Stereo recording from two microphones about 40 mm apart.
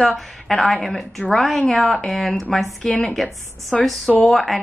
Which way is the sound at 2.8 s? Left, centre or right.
Centre.